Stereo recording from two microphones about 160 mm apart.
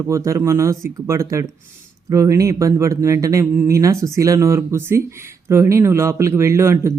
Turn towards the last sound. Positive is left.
turn(degrees=-15)  # may be behind; listen again after turning